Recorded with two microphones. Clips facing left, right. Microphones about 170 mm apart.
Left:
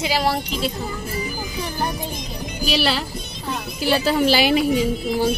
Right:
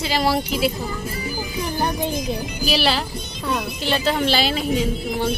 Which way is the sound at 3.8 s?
10° left (ahead or behind).